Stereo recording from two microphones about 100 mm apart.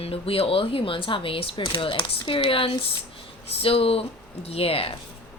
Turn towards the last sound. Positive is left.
turn(degrees=75)  # may be behind; listen again after turning